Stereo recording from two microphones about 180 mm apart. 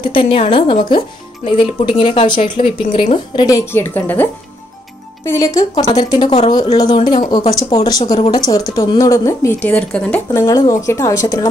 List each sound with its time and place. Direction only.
0.0 s speech: 30° left (ahead or behind)
3.4 s speech: 15° left (ahead or behind)
8.0 s speech: 35° left (ahead or behind)
8.3 s speech: 20° left (ahead or behind)
10.4 s speech: 20° left (ahead or behind)